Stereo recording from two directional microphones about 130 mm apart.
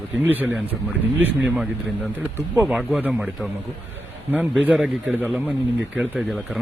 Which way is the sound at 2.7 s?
5° right (ahead or behind).